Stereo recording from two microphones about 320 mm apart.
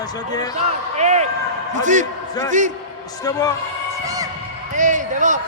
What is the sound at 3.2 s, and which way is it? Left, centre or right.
Speech, centre.